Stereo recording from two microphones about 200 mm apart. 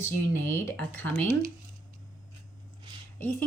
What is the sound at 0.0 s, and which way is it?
Speech, 10° left (ahead or behind).